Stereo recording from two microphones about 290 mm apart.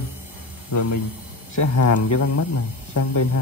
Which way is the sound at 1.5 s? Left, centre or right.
Left.